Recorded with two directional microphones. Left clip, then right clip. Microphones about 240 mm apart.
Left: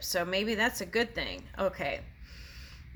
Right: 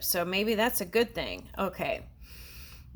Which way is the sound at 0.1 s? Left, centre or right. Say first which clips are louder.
Right 2 dB; right.